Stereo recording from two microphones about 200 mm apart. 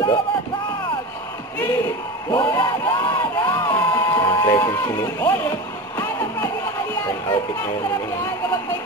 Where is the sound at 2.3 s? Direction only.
20° left (ahead or behind).